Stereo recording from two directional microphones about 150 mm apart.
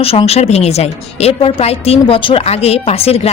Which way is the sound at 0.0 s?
40° left (ahead or behind).